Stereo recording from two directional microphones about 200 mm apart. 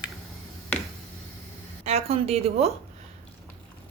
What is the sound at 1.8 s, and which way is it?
Speech, 30° right (ahead or behind).